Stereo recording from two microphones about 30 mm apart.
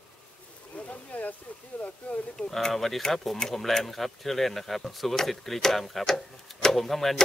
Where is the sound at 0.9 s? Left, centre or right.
Left.